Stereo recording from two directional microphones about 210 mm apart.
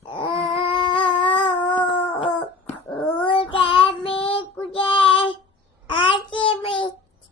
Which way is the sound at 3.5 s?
25° left (ahead or behind).